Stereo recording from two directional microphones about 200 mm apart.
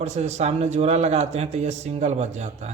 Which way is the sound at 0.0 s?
35° right (ahead or behind).